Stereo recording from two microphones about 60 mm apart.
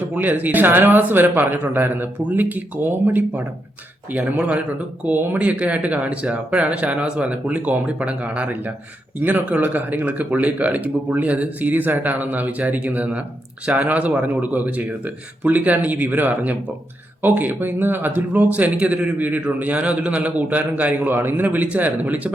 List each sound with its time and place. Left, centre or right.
0.1 s speech: right
4.1 s speech: right
5.0 s speech: right
21.1 s speech: right